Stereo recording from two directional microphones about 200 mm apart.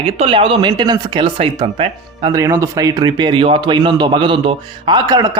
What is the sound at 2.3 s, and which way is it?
Speech, 15° right (ahead or behind).